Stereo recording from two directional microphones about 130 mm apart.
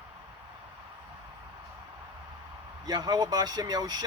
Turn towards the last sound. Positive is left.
turn(degrees=-30)  # may be behind; listen again after turning